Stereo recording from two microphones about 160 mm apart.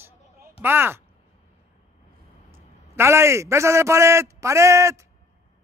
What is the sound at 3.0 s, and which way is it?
A man's voice, 15° right (ahead or behind).